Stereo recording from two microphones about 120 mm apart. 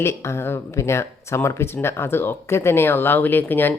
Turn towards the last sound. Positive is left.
turn(degrees=15)  # may be behind; listen again after turning